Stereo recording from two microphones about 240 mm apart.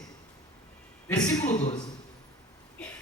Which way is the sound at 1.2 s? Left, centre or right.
Centre.